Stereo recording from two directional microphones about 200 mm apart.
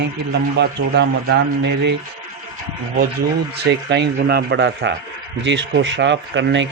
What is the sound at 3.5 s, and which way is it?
A man's voice, 55° right (ahead or behind).